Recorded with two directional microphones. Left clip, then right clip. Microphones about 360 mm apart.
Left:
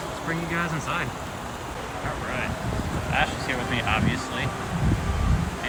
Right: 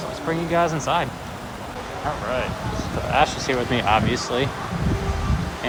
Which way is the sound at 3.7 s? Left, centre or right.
Centre.